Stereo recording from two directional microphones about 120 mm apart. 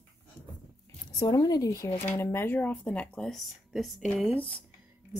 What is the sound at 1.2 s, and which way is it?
Speech, 30° left (ahead or behind).